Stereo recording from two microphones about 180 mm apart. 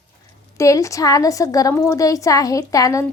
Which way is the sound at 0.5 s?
15° left (ahead or behind).